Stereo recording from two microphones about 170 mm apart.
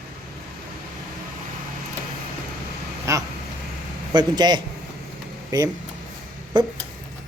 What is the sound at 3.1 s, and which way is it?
Vehicle, 15° right (ahead or behind).